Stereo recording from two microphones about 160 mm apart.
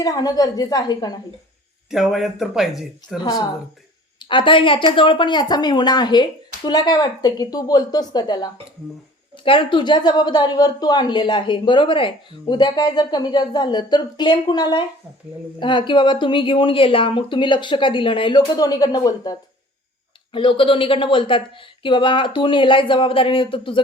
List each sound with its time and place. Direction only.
0.0 s a woman's voice: 25° left (ahead or behind)
1.9 s speech: centre (ahead or behind)
4.2 s a woman's voice: 30° left (ahead or behind)